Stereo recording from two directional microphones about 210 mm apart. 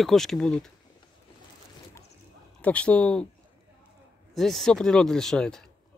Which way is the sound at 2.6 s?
5° left (ahead or behind).